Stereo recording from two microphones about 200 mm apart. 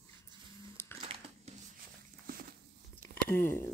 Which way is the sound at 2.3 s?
45° right (ahead or behind).